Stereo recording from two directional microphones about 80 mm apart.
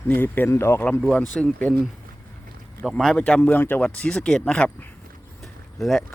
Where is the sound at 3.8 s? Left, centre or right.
Centre.